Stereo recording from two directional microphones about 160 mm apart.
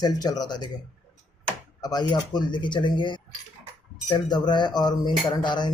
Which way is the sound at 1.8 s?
25° left (ahead or behind).